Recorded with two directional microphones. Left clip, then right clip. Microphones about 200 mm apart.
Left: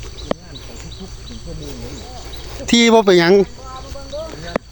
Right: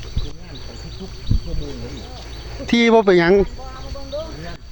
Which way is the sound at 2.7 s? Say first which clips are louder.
Left 2 dB; 20° left (ahead or behind).